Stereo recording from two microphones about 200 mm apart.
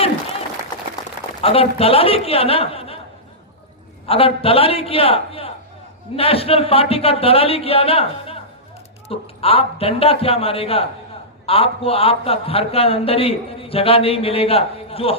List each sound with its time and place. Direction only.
1.4 s a man's voice: 30° left (ahead or behind)
4.0 s a man's voice: 30° left (ahead or behind)